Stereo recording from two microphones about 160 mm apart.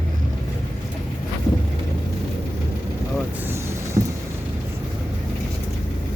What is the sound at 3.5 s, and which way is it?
Vehicle, 15° right (ahead or behind).